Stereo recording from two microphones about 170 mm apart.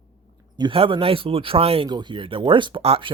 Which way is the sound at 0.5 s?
30° right (ahead or behind).